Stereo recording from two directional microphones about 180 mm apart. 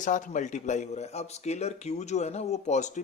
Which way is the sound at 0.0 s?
45° left (ahead or behind).